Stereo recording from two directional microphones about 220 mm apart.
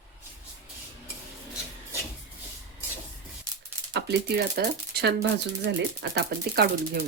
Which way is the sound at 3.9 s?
50° right (ahead or behind).